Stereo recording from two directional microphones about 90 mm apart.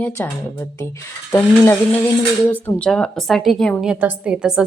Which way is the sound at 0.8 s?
35° left (ahead or behind).